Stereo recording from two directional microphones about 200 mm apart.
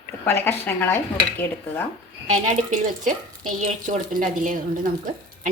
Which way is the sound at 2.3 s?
35° right (ahead or behind).